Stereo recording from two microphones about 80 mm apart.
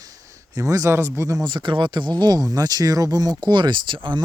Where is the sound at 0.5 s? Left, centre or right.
Right.